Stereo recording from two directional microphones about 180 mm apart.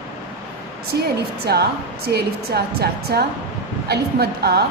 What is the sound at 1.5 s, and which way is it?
A woman's voice, 60° right (ahead or behind).